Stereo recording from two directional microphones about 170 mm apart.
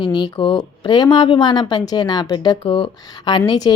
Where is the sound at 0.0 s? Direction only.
25° left (ahead or behind).